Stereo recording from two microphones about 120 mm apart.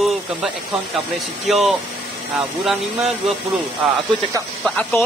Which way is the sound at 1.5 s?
Centre (ahead or behind).